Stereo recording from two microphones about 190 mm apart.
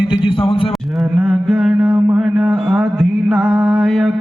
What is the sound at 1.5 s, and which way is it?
Mantra, 5° right (ahead or behind).